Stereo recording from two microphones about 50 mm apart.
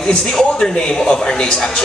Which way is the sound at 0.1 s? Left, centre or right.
Centre.